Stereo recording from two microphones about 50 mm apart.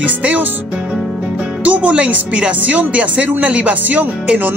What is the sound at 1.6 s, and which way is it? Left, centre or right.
Speech, right.